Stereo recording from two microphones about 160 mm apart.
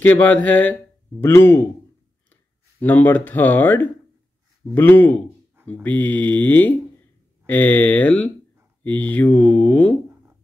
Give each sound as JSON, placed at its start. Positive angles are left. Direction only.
{"t": 0.0, "sound": "speech", "side_deg": 10}
{"t": 2.8, "sound": "speech", "side_deg": 10}